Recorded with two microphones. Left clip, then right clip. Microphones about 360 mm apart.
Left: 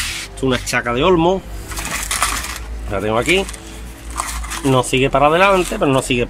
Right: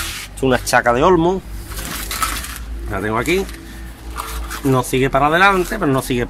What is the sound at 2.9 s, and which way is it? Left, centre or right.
Speech, centre.